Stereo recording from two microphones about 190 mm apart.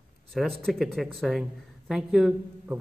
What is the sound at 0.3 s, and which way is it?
Speech, centre (ahead or behind).